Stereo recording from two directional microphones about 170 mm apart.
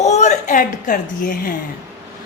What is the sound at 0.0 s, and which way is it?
A woman's voice, 40° left (ahead or behind).